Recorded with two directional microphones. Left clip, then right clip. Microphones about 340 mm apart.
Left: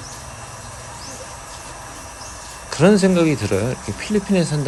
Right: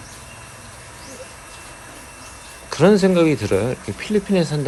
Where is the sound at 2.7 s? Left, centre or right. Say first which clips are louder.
Right 1 dB; centre.